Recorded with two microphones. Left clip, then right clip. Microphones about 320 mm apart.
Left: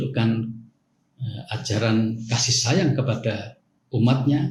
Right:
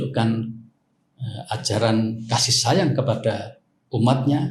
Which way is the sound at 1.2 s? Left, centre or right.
Centre.